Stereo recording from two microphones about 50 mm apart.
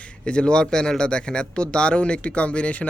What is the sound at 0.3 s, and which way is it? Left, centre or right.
Speech, centre.